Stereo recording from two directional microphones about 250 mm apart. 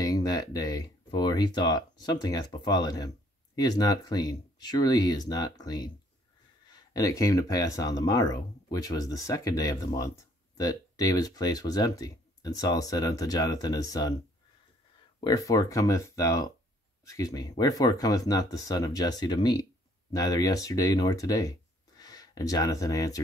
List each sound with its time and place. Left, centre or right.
0.0 s speech: centre
15.1 s speech: centre